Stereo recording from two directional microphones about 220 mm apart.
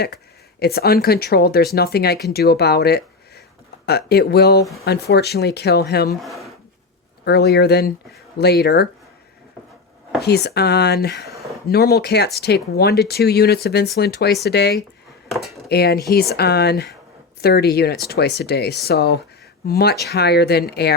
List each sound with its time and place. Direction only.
0.6 s speech: 45° left (ahead or behind)
6.2 s speech: centre (ahead or behind)
7.3 s speech: 45° left (ahead or behind)
10.2 s speech: 45° left (ahead or behind)